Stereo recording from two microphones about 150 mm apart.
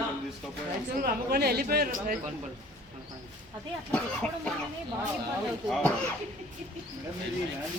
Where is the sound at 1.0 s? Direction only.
90° right.